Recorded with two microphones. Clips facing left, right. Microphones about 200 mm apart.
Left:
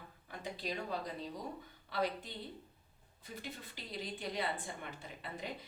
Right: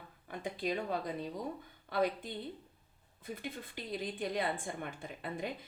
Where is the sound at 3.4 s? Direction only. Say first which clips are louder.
Right 4 dB; 50° right (ahead or behind).